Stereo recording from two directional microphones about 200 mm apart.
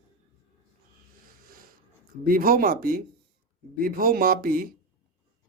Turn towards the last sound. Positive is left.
turn(degrees=-45)  # may be behind; listen again after turning